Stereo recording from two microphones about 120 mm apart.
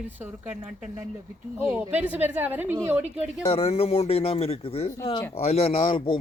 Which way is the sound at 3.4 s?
55° left (ahead or behind).